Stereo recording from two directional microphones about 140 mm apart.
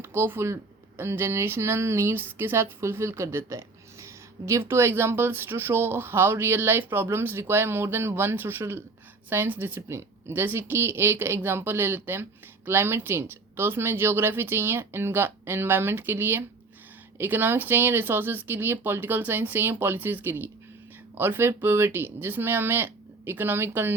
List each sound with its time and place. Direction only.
0.0 s speech: 15° right (ahead or behind)